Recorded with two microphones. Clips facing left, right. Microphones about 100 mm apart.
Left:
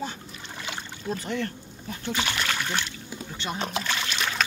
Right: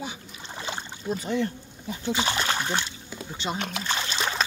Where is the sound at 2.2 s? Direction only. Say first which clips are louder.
Right 2 dB; 25° right (ahead or behind).